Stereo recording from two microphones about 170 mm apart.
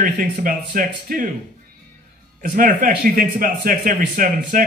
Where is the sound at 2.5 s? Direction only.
50° right (ahead or behind).